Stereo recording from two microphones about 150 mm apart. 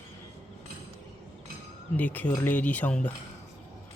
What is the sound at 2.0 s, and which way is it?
Speech, 10° left (ahead or behind).